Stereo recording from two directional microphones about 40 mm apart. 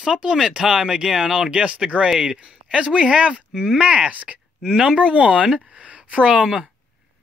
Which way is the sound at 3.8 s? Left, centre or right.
Right.